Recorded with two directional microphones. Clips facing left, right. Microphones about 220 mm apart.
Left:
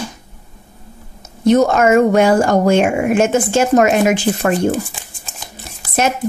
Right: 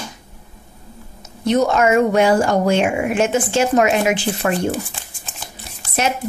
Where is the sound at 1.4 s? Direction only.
45° left (ahead or behind).